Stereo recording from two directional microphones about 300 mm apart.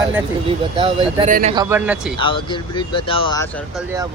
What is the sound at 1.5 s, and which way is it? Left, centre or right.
Speech, centre.